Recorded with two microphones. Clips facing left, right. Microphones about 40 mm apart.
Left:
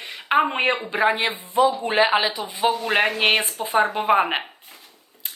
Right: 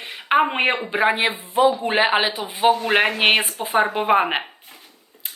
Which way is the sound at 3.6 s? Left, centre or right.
Centre.